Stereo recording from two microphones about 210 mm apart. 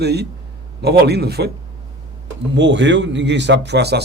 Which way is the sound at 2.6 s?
60° right (ahead or behind).